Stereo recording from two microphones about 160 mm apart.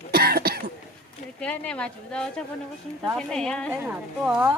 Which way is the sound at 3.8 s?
10° right (ahead or behind).